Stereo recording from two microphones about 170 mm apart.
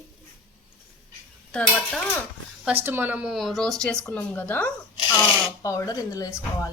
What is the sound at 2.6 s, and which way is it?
Speech, 10° right (ahead or behind).